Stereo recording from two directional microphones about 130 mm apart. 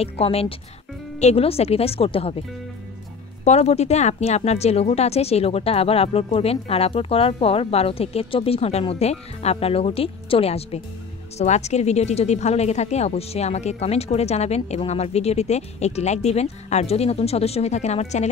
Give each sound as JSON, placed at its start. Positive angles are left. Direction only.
{"t": 0.0, "sound": "speech", "side_deg": 50}
{"t": 3.4, "sound": "speech", "side_deg": 55}